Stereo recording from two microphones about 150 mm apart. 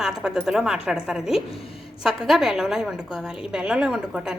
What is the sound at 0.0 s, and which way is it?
A woman's voice, 5° right (ahead or behind).